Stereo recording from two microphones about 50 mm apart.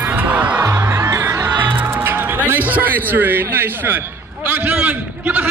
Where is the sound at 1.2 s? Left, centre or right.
Right.